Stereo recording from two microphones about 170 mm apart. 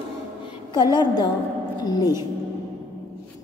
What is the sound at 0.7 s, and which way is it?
Speech, 25° left (ahead or behind).